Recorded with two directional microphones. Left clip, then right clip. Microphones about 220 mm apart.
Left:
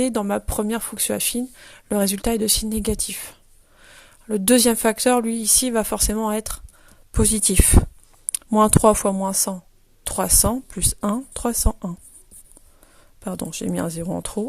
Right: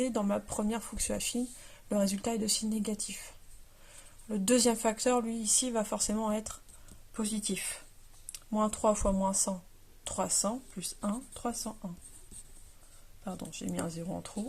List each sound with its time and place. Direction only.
0.0 s speech: 40° left (ahead or behind)
13.2 s speech: 50° left (ahead or behind)